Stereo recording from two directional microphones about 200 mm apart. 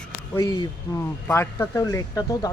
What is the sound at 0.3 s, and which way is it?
Speech, 15° left (ahead or behind).